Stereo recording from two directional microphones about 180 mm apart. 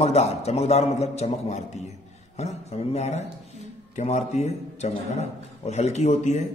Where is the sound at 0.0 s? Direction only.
35° left (ahead or behind).